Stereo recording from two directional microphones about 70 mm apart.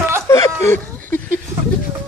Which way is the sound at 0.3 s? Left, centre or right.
Left.